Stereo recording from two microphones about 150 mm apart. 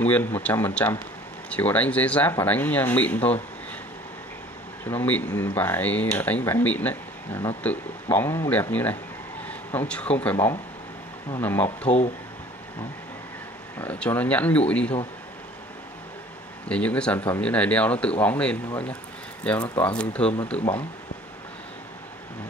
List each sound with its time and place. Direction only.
0.0 s speech: 10° left (ahead or behind)
4.8 s a man's voice: 10° left (ahead or behind)
10.3 s speech: 20° left (ahead or behind)
13.7 s speech: 10° left (ahead or behind)
16.6 s speech: 10° left (ahead or behind)